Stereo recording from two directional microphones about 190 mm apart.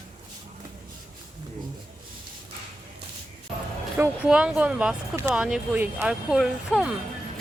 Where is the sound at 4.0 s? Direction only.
5° right (ahead or behind).